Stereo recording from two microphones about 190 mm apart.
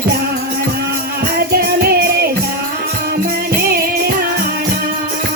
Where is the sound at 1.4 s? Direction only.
55° right (ahead or behind).